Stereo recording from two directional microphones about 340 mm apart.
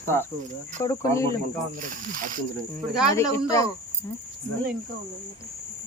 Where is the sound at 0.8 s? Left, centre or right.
Centre.